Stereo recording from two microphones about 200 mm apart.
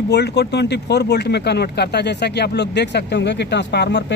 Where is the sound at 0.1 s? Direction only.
55° left (ahead or behind).